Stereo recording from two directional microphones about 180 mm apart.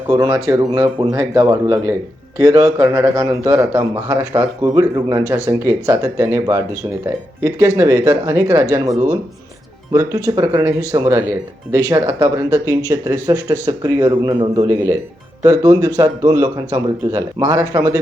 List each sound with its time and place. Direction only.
0.1 s a man's voice: 20° right (ahead or behind)